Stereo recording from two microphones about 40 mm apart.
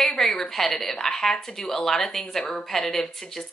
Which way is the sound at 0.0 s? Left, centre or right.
Centre.